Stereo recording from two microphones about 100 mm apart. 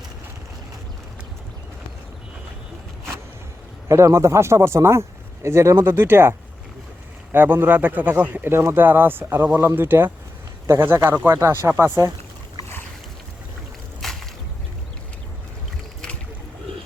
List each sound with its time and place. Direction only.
3.8 s speech: 30° right (ahead or behind)
7.3 s speech: 20° right (ahead or behind)
14.0 s boat: 5° left (ahead or behind)